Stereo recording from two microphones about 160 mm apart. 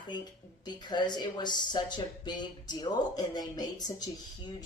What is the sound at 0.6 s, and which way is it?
Speech, 30° left (ahead or behind).